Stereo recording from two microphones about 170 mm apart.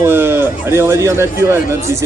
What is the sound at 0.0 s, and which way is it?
Speech, 15° right (ahead or behind).